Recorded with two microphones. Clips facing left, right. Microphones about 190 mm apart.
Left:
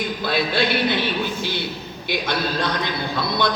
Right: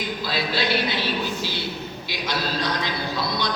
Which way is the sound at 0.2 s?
55° left (ahead or behind).